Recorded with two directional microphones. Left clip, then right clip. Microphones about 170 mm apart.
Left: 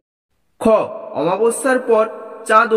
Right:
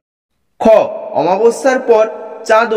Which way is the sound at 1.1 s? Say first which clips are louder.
Right 5 dB; 15° right (ahead or behind).